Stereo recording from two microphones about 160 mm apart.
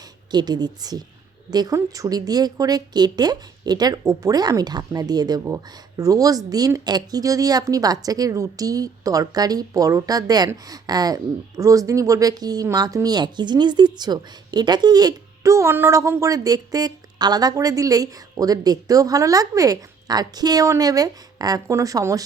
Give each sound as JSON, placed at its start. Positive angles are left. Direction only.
{"t": 0.0, "sound": "speech", "side_deg": -25}